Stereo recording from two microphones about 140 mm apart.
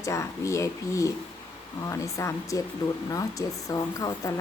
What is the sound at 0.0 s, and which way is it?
Speech, 20° left (ahead or behind).